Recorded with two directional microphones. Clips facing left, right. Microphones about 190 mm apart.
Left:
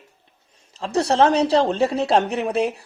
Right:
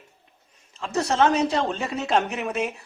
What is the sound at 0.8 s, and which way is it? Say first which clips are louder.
Speech: left 4 dB; 35° left (ahead or behind).